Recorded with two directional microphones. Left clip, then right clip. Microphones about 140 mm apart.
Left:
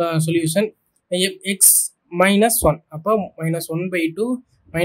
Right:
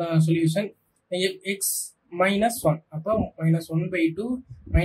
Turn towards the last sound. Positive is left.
turn(degrees=75)  # may be behind; listen again after turning